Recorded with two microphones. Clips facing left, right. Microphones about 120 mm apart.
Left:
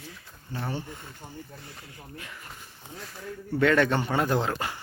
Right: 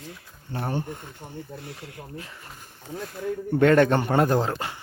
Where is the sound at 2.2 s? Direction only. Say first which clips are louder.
Right 3 dB; 30° right (ahead or behind).